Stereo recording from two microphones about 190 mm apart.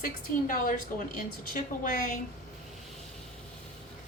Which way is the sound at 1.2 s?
45° left (ahead or behind).